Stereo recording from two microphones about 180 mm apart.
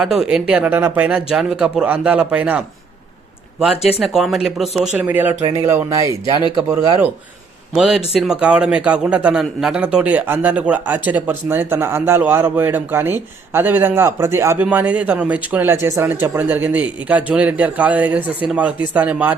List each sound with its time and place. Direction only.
0.0 s a man's voice: 5° right (ahead or behind)
4.0 s a man's voice: centre (ahead or behind); by 6.4 s 15° right (ahead or behind)
7.7 s a man's voice: centre (ahead or behind)